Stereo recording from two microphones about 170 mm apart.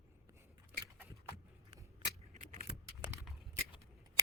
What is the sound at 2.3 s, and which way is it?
Keys jangling, 45° right (ahead or behind).